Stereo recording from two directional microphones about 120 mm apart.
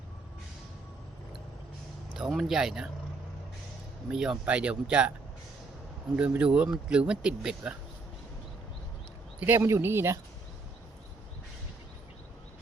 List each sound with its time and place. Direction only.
2.1 s speech: 5° right (ahead or behind)
4.1 s speech: 5° right (ahead or behind)
6.1 s speech: 10° right (ahead or behind)
9.4 s speech: 20° right (ahead or behind)